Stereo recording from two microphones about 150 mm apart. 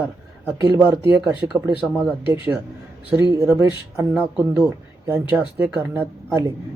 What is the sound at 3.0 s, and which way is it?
Speech, 15° right (ahead or behind).